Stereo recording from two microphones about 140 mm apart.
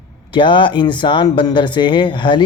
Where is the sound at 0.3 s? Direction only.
35° left (ahead or behind).